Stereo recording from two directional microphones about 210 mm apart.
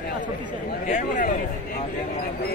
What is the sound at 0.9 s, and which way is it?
Speech, 35° left (ahead or behind).